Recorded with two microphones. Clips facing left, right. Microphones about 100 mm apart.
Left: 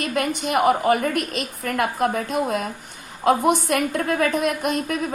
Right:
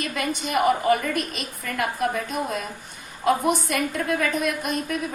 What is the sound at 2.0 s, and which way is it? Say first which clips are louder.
Speech: left 3 dB; 45° left (ahead or behind).